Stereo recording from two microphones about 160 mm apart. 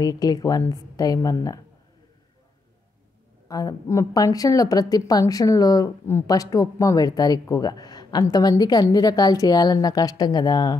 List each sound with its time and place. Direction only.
0.0 s a woman's voice: 25° left (ahead or behind)
3.4 s a woman's voice: 25° left (ahead or behind)